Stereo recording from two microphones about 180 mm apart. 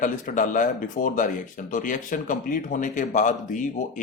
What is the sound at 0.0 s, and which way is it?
Speech, 45° left (ahead or behind).